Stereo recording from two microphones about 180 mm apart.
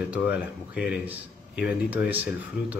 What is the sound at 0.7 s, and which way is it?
Speech, 5° right (ahead or behind).